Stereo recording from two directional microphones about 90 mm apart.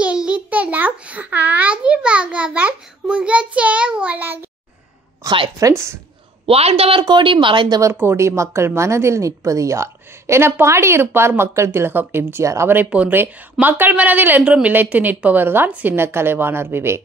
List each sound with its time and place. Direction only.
0.0 s a sound: 10° right (ahead or behind)
5.2 s a woman's voice: 40° right (ahead or behind)
6.4 s a woman's voice: 90° right; by 7.8 s 60° right (ahead or behind)
7.8 s a woman's voice: 25° right (ahead or behind)
12.7 s a woman's voice: 20° right (ahead or behind)